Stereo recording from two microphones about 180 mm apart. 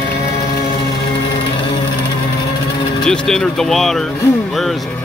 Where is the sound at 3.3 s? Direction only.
Centre (ahead or behind).